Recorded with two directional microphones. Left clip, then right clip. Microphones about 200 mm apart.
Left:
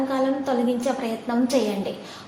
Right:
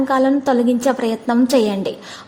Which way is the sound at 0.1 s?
45° right (ahead or behind).